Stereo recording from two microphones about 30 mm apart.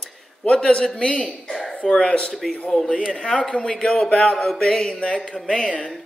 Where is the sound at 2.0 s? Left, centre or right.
Left.